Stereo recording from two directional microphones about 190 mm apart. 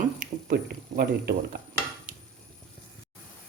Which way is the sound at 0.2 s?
50° right (ahead or behind).